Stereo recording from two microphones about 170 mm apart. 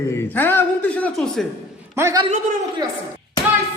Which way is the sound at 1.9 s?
15° right (ahead or behind).